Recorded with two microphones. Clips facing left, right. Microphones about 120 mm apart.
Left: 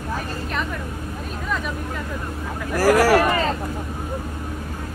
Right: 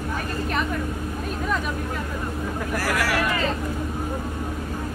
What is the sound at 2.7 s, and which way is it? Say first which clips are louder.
Speech: left 10 dB; 40° left (ahead or behind).